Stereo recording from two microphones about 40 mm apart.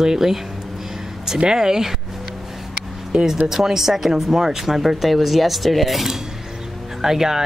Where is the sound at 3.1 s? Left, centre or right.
Centre.